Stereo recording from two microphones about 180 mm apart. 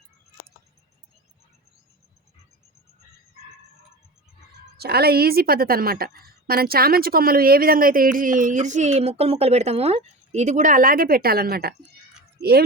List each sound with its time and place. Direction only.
4.8 s a woman's voice: 60° right (ahead or behind)